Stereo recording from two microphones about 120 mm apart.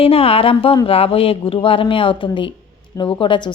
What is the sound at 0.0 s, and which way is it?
A woman's voice, 50° left (ahead or behind).